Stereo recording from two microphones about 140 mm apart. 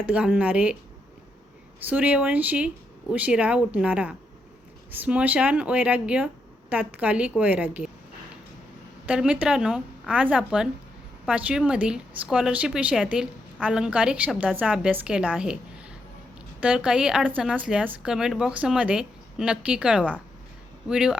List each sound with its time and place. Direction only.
0.0 s a woman's voice: 10° right (ahead or behind)
1.9 s a woman's voice: 10° right (ahead or behind)
9.0 s a woman's voice: 5° right (ahead or behind)
16.6 s a woman's voice: 10° right (ahead or behind)